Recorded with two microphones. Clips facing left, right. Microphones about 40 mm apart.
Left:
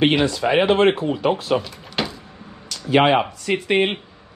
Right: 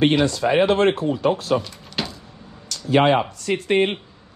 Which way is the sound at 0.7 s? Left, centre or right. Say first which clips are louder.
Left 2 dB; left.